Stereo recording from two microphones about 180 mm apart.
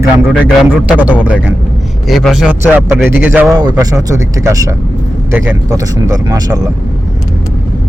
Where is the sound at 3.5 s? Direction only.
20° right (ahead or behind).